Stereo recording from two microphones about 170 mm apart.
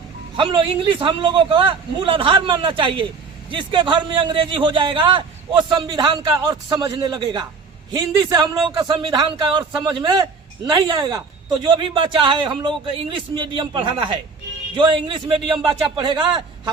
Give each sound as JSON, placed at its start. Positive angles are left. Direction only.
{"t": 0.3, "sound": "a man's voice", "side_deg": -30}